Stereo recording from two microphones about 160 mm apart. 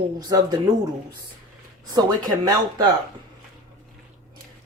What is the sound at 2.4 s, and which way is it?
Speech, 25° right (ahead or behind).